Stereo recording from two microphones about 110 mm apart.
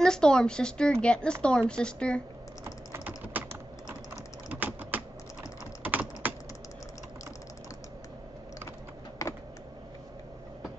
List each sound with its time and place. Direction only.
0.0 s speech: 5° left (ahead or behind)
2.6 s typing: 20° right (ahead or behind)
4.5 s typing: 15° right (ahead or behind)